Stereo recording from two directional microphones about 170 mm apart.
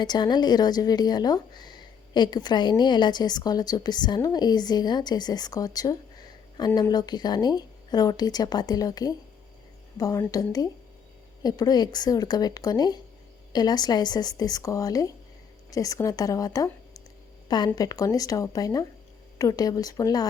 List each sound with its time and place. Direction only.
0.0 s speech: 25° left (ahead or behind)
17.7 s speech: 20° left (ahead or behind)